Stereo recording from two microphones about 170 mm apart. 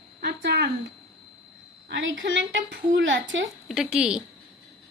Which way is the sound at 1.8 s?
90° right.